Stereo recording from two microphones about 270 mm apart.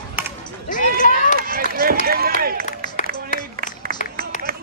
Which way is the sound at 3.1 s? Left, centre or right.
Right.